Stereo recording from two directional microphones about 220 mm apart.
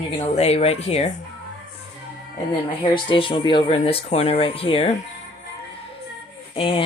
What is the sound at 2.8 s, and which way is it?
Cutlery, 25° left (ahead or behind).